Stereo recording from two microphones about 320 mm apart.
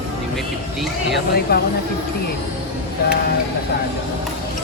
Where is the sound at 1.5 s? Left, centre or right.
Left.